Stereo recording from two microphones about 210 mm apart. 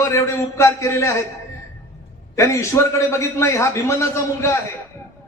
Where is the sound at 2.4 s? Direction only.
15° left (ahead or behind).